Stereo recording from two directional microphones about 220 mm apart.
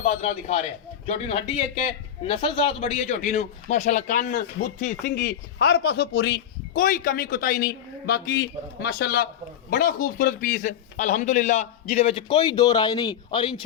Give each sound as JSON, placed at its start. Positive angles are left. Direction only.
{"t": 0.0, "sound": "a man's voice", "side_deg": 30}